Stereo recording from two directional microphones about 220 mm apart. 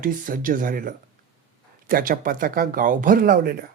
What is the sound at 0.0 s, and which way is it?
Speech, 40° right (ahead or behind).